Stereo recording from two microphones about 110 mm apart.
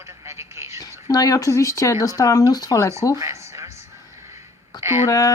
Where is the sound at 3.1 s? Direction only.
25° right (ahead or behind).